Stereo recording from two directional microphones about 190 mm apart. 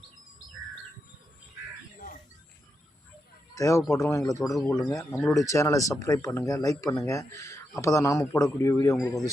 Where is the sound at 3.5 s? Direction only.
15° left (ahead or behind).